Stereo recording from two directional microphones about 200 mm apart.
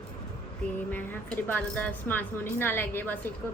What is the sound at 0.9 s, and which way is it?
A woman's voice, 10° left (ahead or behind).